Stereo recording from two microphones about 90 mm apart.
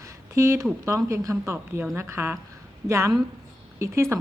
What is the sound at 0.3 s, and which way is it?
Speech, 30° right (ahead or behind).